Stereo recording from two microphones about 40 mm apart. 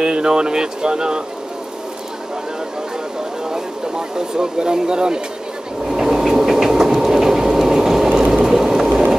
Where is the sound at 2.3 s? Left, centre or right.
Centre.